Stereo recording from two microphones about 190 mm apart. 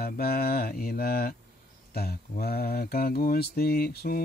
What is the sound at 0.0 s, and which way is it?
Mantra, 50° left (ahead or behind).